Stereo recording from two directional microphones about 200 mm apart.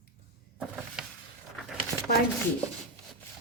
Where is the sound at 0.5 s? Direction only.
Centre (ahead or behind).